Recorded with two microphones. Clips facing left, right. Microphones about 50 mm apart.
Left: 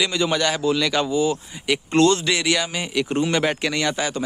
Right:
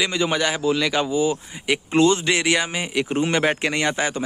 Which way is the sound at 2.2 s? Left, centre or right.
Right.